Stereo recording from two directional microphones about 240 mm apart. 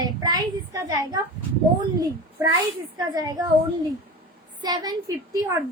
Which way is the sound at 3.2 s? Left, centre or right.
Centre.